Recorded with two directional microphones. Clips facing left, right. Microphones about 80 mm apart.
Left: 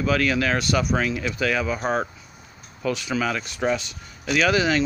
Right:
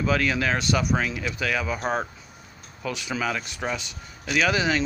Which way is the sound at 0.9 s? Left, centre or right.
Centre.